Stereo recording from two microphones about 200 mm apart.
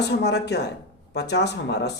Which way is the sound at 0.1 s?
55° left (ahead or behind).